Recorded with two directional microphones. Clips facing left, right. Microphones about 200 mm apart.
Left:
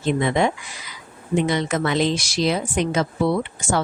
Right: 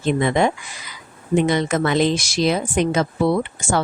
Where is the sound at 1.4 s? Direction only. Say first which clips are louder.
Right 3 dB; 50° right (ahead or behind).